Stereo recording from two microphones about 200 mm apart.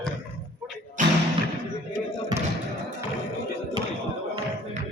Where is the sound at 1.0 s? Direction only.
40° right (ahead or behind).